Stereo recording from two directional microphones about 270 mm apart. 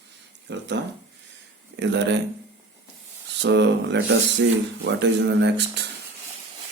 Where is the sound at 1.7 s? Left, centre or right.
Right.